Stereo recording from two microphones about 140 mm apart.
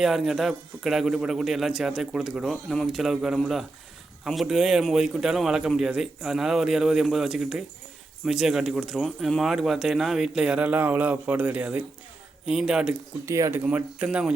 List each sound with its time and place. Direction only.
0.0 s speech: centre (ahead or behind)
13.2 s speech: 20° right (ahead or behind)
13.7 s speech: 10° right (ahead or behind)